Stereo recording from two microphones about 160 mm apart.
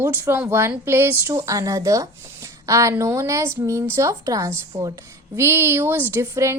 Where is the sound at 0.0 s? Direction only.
15° right (ahead or behind).